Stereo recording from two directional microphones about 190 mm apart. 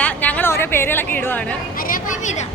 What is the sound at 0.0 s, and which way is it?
Chatter, 5° left (ahead or behind).